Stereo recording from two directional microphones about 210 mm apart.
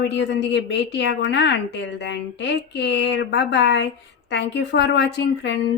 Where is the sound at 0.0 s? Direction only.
55° left (ahead or behind).